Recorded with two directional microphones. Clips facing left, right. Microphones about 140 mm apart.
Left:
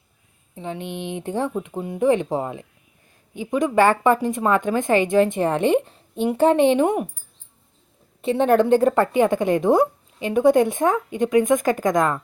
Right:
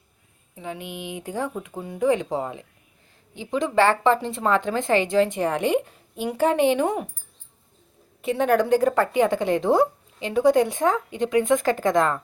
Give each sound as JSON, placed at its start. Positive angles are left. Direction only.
{"t": 0.5, "sound": "a sound", "side_deg": 25}
{"t": 0.8, "sound": "speech", "side_deg": -10}
{"t": 1.1, "sound": "a woman's voice", "side_deg": 25}
{"t": 8.2, "sound": "a woman's voice", "side_deg": 25}